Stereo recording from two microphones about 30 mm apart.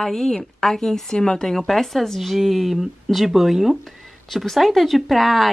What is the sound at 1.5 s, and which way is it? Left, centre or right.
Speech, centre.